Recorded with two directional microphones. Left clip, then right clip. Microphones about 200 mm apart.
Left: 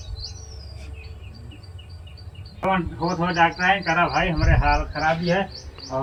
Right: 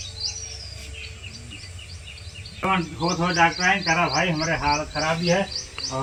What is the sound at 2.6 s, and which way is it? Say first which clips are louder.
Speech: left 1 dB; centre (ahead or behind).